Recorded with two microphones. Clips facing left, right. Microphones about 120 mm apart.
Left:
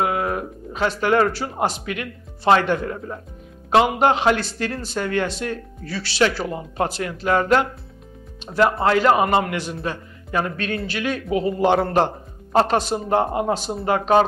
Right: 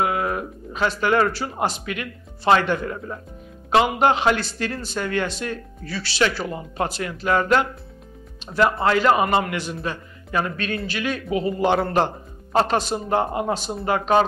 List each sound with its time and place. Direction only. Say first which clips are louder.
0.0 s speech: left 1 dB; 35° left (ahead or behind)
1.7 s a man's voice: left 1 dB; 45° left (ahead or behind)
3.7 s a man's voice: left 1 dB; 45° left (ahead or behind)
11.7 s a man's voice: left 2 dB; 35° left (ahead or behind)
13.1 s speech: left 2 dB; 25° left (ahead or behind)
13.8 s a man's voice: left 2 dB; 40° left (ahead or behind)